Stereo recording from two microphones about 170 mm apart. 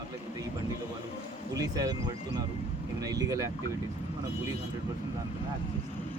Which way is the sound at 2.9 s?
20° right (ahead or behind).